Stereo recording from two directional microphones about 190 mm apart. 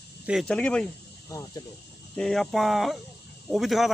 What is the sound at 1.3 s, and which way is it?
Speech, 20° left (ahead or behind).